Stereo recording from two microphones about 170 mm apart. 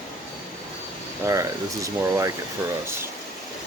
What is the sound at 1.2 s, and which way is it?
Speech, 20° right (ahead or behind).